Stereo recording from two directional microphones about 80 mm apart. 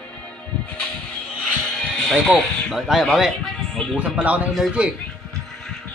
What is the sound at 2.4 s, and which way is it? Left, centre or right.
Speech, centre.